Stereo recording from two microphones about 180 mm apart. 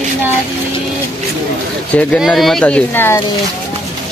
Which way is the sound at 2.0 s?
Centre (ahead or behind).